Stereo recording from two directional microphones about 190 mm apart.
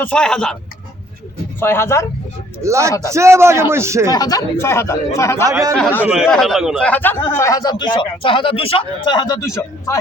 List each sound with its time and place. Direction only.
0.0 s speech: 5° left (ahead or behind)
1.5 s a man's voice: 10° left (ahead or behind)
2.6 s a man's voice: 15° right (ahead or behind)
4.1 s a man's voice: 20° left (ahead or behind)
5.5 s a man's voice: 15° right (ahead or behind)
5.7 s a man's voice: 5° left (ahead or behind)